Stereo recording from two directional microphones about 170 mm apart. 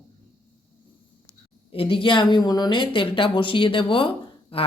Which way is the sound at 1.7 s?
30° left (ahead or behind).